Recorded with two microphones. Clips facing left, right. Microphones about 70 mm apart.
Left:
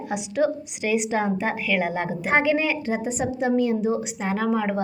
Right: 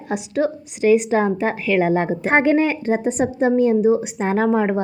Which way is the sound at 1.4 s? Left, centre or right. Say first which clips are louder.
Right 5 dB; right.